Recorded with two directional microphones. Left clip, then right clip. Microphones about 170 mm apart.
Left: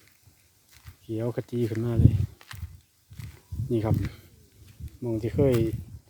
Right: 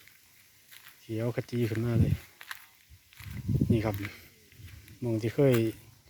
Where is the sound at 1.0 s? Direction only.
20° left (ahead or behind).